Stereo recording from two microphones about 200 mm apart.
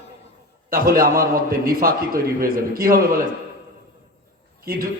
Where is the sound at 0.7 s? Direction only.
45° right (ahead or behind).